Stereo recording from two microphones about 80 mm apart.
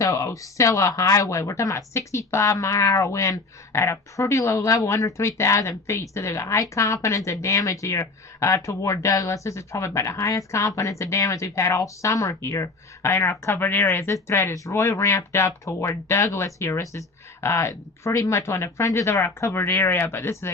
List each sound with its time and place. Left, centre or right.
0.0 s speech: left
4.5 s speech: left
4.9 s speech: left